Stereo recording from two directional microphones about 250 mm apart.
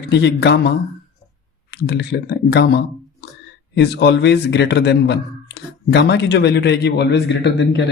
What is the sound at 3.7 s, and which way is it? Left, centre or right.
Speech, left.